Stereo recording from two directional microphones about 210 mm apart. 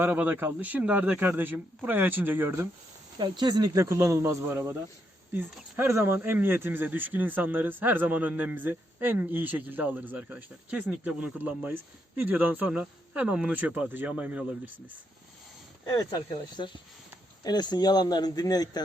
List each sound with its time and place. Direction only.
0.0 s speech: 10° right (ahead or behind)
16.0 s speech: 20° left (ahead or behind)